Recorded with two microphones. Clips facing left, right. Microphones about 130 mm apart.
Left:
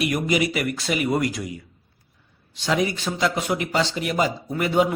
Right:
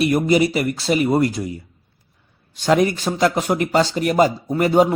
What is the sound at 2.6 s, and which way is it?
A man's voice, 50° right (ahead or behind).